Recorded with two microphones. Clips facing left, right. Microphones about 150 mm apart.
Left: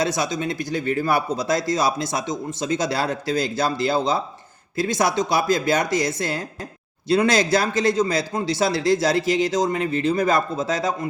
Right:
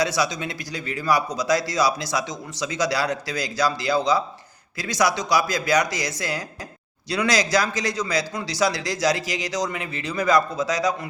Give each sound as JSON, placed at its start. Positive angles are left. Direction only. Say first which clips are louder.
{"t": 0.0, "sound": "a man's voice", "louder": "left 1 dB", "side_deg": 50}
{"t": 5.4, "sound": "speech", "louder": "left 2 dB", "side_deg": 25}
{"t": 5.8, "sound": "a man's voice", "louder": "left 6 dB", "side_deg": 55}
{"t": 7.1, "sound": "a man's voice", "louder": "left 4 dB", "side_deg": 50}
{"t": 8.3, "sound": "speech", "louder": "left 2 dB", "side_deg": 30}
{"t": 9.5, "sound": "a man's voice", "louder": "left 6 dB", "side_deg": 50}